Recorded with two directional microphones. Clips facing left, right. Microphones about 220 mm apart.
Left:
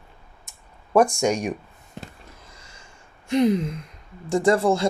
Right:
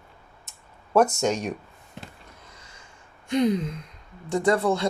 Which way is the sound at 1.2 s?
10° left (ahead or behind).